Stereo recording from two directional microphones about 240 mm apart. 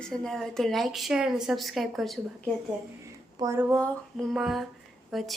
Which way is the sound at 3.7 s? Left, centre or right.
Centre.